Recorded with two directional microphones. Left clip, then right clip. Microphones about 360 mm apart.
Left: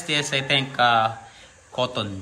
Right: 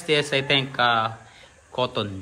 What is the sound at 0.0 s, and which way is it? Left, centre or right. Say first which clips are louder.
Speech: right 2 dB; centre.